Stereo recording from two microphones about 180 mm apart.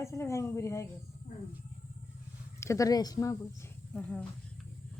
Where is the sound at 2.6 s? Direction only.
15° left (ahead or behind).